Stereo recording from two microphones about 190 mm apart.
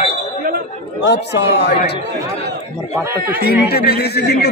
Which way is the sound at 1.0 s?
65° left (ahead or behind).